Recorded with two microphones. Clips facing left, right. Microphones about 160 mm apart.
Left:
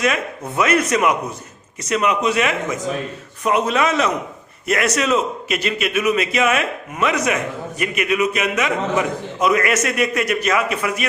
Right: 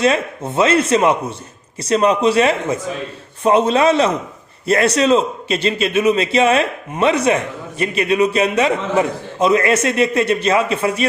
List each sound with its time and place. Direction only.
0.0 s a man's voice: 30° right (ahead or behind)